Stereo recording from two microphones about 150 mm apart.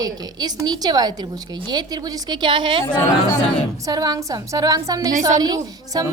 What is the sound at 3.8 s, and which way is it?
A woman's voice, 25° right (ahead or behind).